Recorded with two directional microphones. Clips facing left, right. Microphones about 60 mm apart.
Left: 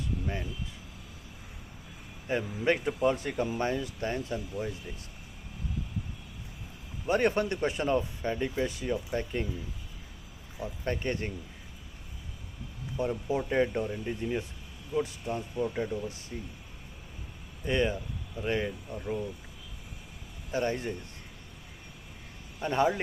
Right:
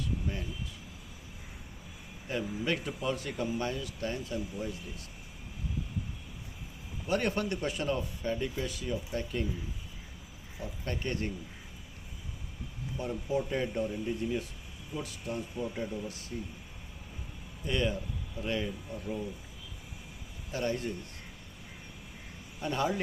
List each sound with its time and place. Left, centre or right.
0.0 s a sound: left
2.2 s speech: left
7.1 s speech: left
10.6 s speech: left
13.0 s speech: left
17.7 s speech: left
20.5 s speech: left
22.6 s speech: left